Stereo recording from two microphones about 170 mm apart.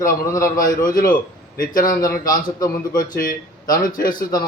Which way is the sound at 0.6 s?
55° left (ahead or behind).